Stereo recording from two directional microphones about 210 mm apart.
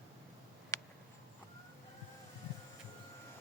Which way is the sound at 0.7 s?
15° left (ahead or behind).